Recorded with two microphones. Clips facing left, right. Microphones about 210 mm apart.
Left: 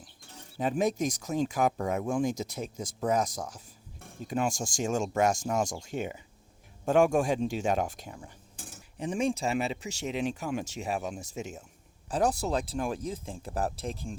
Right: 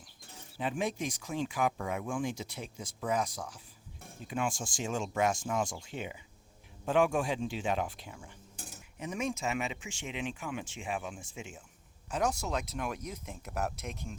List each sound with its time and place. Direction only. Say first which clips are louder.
0.6 s speech: left 6 dB; 40° left (ahead or behind)
9.0 s speech: left 6 dB; 30° left (ahead or behind)